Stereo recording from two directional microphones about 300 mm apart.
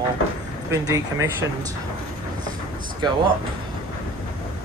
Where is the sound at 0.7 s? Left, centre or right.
Centre.